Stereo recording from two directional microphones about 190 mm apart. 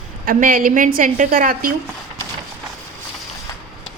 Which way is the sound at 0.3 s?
50° right (ahead or behind).